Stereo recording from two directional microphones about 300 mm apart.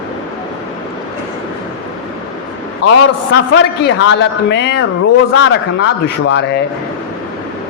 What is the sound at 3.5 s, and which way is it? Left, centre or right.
A man's voice, left.